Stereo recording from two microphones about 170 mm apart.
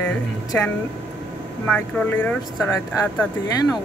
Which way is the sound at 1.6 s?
10° left (ahead or behind).